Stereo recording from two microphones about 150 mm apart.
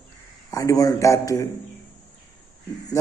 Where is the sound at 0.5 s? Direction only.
25° left (ahead or behind).